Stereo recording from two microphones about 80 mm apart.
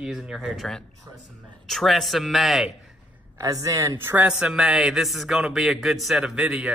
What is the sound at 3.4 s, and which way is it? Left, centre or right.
Speech, right.